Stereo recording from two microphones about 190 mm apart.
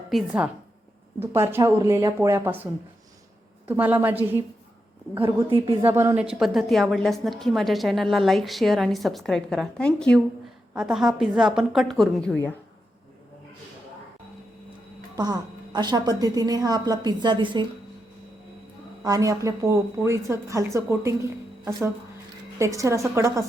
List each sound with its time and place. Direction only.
0.1 s a woman's voice: 5° right (ahead or behind)
3.7 s a woman's voice: 10° right (ahead or behind)
5.2 s a woman's voice: 30° right (ahead or behind)
5.8 s a woman's voice: 15° right (ahead or behind)
15.1 s a woman's voice: 20° right (ahead or behind)
19.0 s a woman's voice: 20° right (ahead or behind)